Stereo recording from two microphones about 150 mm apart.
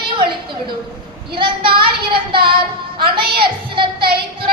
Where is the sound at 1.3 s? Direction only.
35° right (ahead or behind).